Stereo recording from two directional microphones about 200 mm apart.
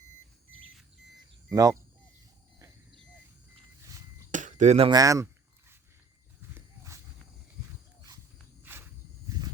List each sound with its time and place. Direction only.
1.5 s speech: 15° right (ahead or behind)
4.3 s chop: 40° right (ahead or behind)
4.9 s a sound: 15° right (ahead or behind)
6.5 s walk: 15° right (ahead or behind)
8.7 s walk: 10° right (ahead or behind)
9.2 s a sound: 20° right (ahead or behind)